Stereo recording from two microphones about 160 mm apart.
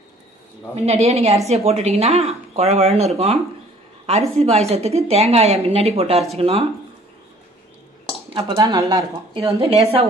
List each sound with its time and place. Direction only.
0.7 s speech: 40° right (ahead or behind)
4.5 s speech: 40° right (ahead or behind)
8.3 s speech: 35° right (ahead or behind)
8.5 s speech: 25° right (ahead or behind); by 10.0 s 40° right (ahead or behind)